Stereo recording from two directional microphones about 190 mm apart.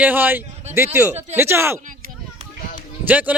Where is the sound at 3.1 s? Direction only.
10° right (ahead or behind).